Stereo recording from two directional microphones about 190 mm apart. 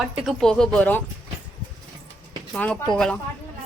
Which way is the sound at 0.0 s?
Centre (ahead or behind).